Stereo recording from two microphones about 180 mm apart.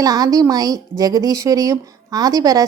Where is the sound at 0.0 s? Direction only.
20° right (ahead or behind).